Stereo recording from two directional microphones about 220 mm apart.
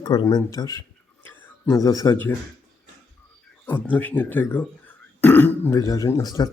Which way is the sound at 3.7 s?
10° left (ahead or behind).